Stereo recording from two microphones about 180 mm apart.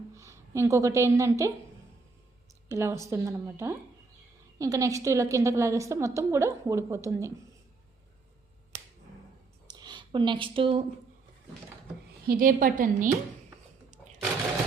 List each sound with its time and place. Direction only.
0.1 s a woman's voice: 15° right (ahead or behind)
2.6 s a woman's voice: 15° right (ahead or behind)
9.6 s a sound: 25° right (ahead or behind)
12.3 s a woman's voice: 50° right (ahead or behind)